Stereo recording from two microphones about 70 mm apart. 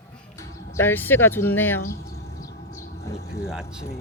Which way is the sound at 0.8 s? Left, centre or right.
Left.